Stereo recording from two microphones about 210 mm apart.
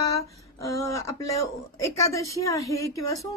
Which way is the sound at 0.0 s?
15° left (ahead or behind).